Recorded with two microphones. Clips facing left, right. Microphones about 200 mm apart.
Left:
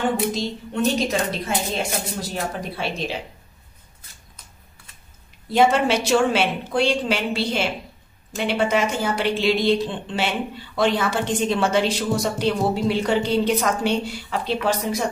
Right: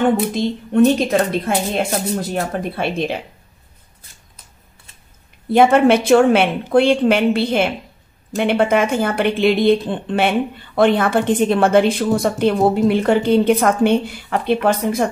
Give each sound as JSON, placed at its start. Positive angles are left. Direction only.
{"t": 0.3, "sound": "speech", "side_deg": -55}
{"t": 5.5, "sound": "speech", "side_deg": -55}